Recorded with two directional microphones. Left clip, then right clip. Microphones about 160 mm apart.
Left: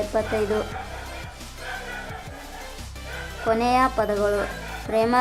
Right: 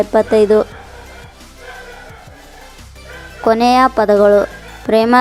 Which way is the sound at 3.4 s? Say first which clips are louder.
Right 10 dB; 55° right (ahead or behind).